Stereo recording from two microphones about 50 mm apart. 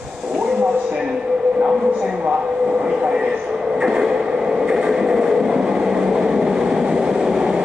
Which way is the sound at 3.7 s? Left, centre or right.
Centre.